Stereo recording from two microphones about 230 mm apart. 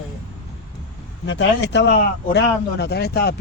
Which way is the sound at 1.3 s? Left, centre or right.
Left.